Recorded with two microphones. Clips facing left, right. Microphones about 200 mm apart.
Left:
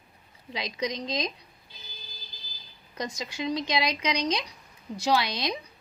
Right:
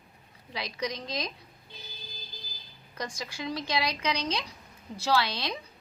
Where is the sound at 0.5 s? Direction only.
20° left (ahead or behind).